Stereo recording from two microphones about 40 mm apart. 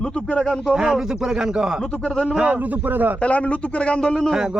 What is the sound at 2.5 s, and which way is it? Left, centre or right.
Speech, right.